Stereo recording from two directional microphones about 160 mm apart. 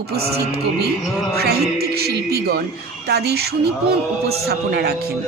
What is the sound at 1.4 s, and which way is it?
Speech, 80° right.